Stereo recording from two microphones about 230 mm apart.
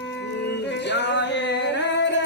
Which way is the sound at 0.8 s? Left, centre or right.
Left.